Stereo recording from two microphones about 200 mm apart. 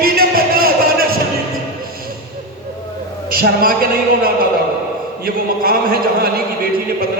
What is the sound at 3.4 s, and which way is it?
Speech, 45° right (ahead or behind).